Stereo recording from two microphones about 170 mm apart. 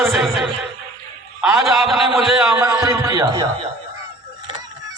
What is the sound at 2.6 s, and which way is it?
Speech, 15° right (ahead or behind).